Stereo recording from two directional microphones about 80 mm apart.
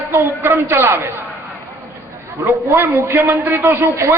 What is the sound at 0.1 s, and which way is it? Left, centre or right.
Speech, right.